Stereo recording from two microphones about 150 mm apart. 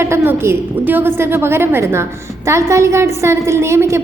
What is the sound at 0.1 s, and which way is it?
A woman's voice, 15° right (ahead or behind).